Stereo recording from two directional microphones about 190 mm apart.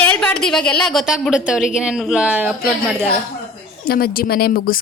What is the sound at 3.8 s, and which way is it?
Speech, 50° left (ahead or behind).